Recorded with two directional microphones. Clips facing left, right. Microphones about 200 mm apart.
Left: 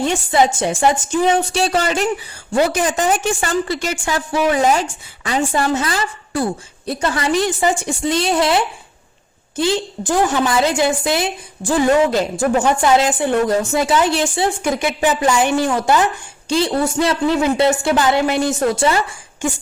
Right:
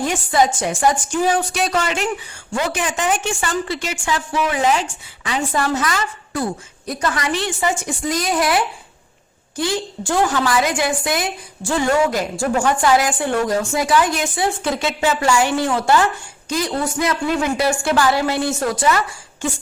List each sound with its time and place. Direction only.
0.0 s a woman's voice: 25° left (ahead or behind); by 5.4 s 40° left (ahead or behind)
5.4 s a woman's voice: 25° left (ahead or behind)
14.6 s a woman's voice: 20° left (ahead or behind)
16.5 s a woman's voice: 30° left (ahead or behind)